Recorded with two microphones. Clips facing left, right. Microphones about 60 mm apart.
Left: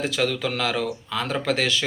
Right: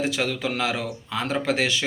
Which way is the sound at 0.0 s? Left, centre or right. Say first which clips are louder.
Left 1 dB; right.